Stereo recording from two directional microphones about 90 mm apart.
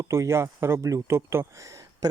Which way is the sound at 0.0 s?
35° right (ahead or behind).